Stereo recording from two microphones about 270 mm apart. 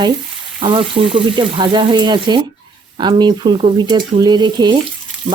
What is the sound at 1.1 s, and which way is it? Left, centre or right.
A woman's voice, centre.